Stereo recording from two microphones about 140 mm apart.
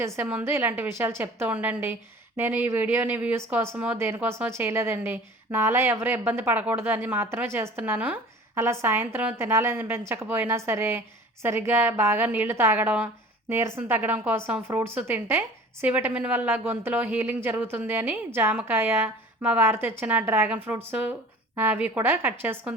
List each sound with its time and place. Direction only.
0.2 s a woman's voice: 15° right (ahead or behind)